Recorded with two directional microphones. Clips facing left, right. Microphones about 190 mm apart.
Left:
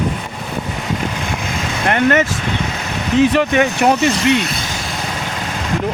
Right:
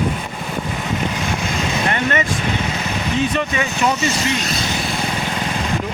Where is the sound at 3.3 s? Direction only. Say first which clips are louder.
Left 6 dB; 65° left (ahead or behind).